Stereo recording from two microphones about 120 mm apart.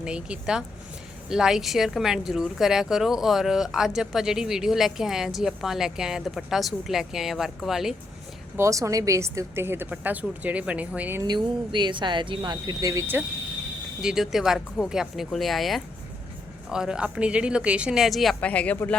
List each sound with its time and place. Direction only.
0.0 s a woman's voice: 10° right (ahead or behind)
8.5 s a woman's voice: 25° right (ahead or behind)
11.2 s speech: 40° right (ahead or behind)
14.0 s a woman's voice: 5° right (ahead or behind)
18.3 s speech: 10° left (ahead or behind)